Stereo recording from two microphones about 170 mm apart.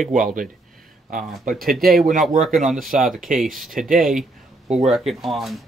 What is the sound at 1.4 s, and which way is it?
Speech, 60° right (ahead or behind).